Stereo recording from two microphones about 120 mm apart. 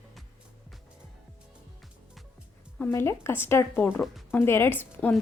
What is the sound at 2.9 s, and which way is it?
A woman's voice, 20° left (ahead or behind).